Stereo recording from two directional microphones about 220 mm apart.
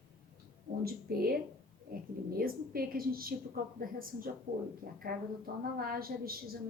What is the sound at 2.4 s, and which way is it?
A woman's voice, 40° right (ahead or behind).